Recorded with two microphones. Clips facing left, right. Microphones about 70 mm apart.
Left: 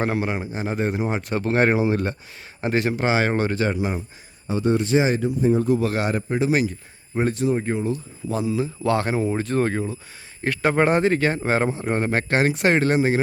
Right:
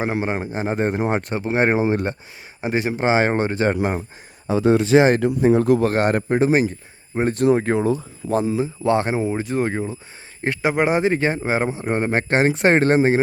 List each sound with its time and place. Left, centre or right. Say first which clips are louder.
0.0 s speech: even; right
0.3 s a man's voice: right 3 dB; right
1.3 s speech: left 3 dB; centre
2.6 s speech: even; centre
3.7 s a man's voice: right 4 dB; right
5.0 s speech: right 4 dB; right
5.8 s a man's voice: right 5 dB; right
7.1 s speech: right 2 dB; right
7.3 s speech: right 5 dB; right
8.3 s a man's voice: right 4 dB; right
8.5 s speech: right 3 dB; right
9.3 s speech: even; centre; by 13.2 s right